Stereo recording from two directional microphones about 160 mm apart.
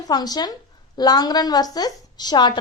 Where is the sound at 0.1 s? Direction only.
25° left (ahead or behind).